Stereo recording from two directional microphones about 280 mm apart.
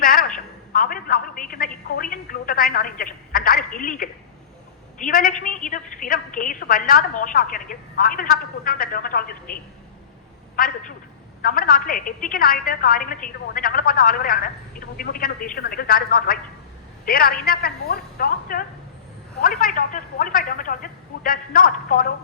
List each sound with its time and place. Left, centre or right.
0.0 s a sound: left
2.0 s a woman's voice: left
10.6 s a woman's voice: left